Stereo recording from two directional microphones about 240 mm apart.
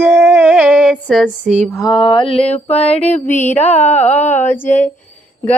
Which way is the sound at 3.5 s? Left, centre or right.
Centre.